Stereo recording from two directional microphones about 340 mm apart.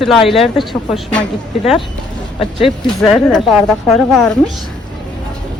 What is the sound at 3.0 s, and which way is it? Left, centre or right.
A woman's voice, centre.